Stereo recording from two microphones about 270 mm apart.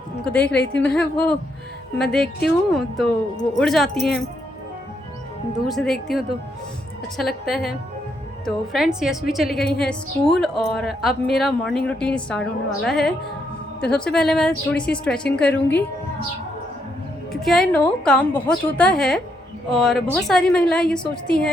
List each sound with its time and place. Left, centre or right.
0.3 s a woman's voice: centre
5.6 s a woman's voice: centre
9.6 s a woman's voice: left
9.9 s a woman's voice: centre
17.4 s a woman's voice: centre